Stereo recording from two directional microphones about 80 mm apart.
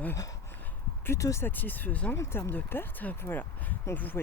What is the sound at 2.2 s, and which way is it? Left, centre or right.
Speech, left.